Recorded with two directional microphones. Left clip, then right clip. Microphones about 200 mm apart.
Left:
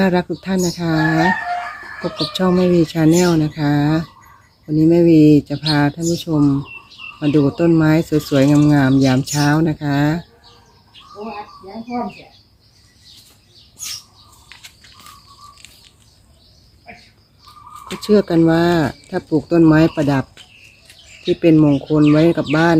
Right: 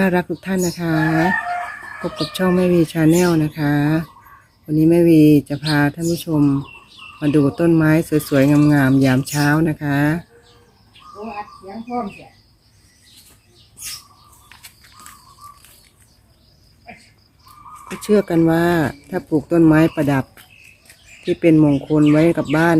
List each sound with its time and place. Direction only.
0.0 s speech: centre (ahead or behind)
14.5 s a sound: 25° right (ahead or behind)
18.0 s speech: 5° left (ahead or behind)
21.2 s speech: 5° left (ahead or behind)